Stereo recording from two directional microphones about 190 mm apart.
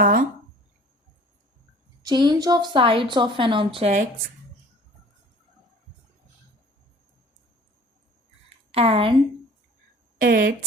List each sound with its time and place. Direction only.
0.0 s a sound: 50° right (ahead or behind)
2.0 s a woman's voice: 20° right (ahead or behind); by 4.1 s 35° right (ahead or behind)
8.7 s a woman's voice: 30° right (ahead or behind)
10.2 s speech: 45° right (ahead or behind)